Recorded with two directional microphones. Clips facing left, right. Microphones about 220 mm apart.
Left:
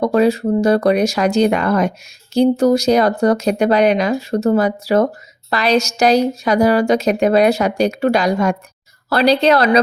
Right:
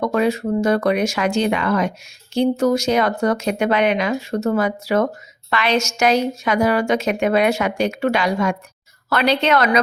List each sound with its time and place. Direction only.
0.0 s a woman's voice: 35° left (ahead or behind)